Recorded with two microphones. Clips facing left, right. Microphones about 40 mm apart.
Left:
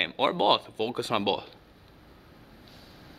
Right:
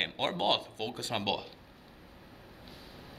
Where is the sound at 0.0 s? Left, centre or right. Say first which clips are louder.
Left 6 dB; left.